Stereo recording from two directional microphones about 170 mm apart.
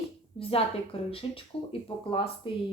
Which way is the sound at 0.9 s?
35° left (ahead or behind).